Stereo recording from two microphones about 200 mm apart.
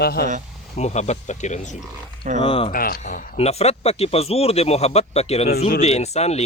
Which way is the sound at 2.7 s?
45° left (ahead or behind).